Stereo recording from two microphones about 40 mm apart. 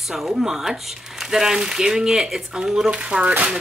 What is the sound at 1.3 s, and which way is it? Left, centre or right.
Speech, centre.